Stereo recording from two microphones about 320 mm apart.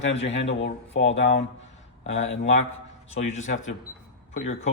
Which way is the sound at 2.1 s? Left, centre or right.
Left.